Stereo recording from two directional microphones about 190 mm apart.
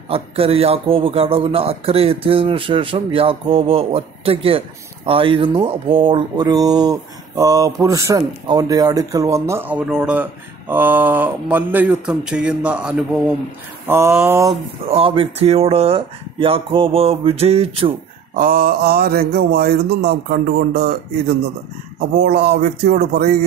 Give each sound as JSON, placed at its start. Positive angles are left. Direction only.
{"t": 0.1, "sound": "a man's voice", "side_deg": -30}
{"t": 14.9, "sound": "speech", "side_deg": -30}
{"t": 18.3, "sound": "mantra", "side_deg": -50}
{"t": 22.2, "sound": "speech", "side_deg": -60}